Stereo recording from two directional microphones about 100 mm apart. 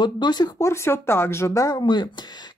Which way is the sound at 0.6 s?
25° left (ahead or behind).